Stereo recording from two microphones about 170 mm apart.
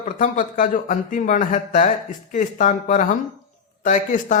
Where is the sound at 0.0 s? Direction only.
50° left (ahead or behind).